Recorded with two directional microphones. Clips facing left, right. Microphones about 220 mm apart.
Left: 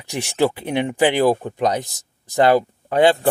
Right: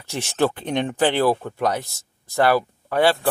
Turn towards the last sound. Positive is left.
turn(degrees=20)  # may be behind; listen again after turning